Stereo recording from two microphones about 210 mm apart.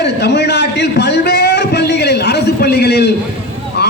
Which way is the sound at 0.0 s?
55° left (ahead or behind).